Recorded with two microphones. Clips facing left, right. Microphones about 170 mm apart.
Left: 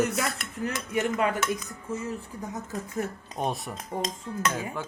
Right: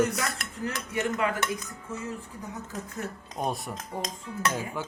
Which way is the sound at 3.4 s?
Centre (ahead or behind).